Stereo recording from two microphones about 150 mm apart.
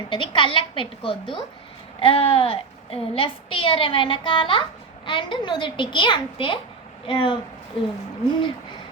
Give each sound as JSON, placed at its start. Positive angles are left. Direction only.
{"t": 0.1, "sound": "a woman's voice", "side_deg": 35}